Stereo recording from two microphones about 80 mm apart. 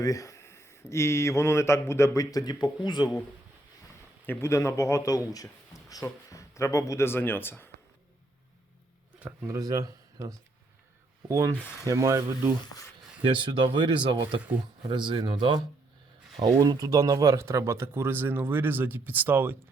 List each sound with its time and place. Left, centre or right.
0.0 s speech: left
2.3 s speech: left
4.3 s speech: left
9.5 s speech: right
13.3 s speech: right
16.6 s speech: right